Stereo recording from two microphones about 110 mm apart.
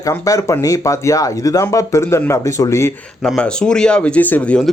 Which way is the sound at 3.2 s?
5° left (ahead or behind).